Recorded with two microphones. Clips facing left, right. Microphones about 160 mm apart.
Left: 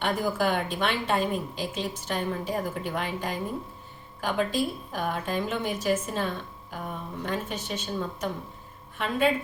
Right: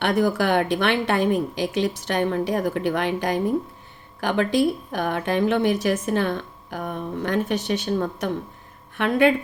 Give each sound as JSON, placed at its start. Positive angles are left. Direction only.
{"t": 0.0, "sound": "a woman's voice", "side_deg": -75}